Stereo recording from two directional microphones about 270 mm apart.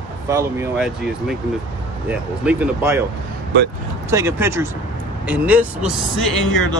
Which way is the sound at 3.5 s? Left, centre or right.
Right.